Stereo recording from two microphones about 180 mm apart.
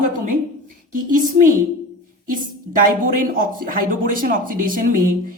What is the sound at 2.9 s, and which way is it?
Speech, 50° right (ahead or behind).